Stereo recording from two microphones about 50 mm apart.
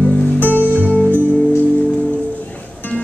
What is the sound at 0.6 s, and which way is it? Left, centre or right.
Music, right.